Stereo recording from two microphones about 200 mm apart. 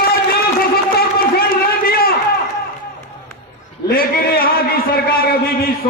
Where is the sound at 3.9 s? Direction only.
50° left (ahead or behind).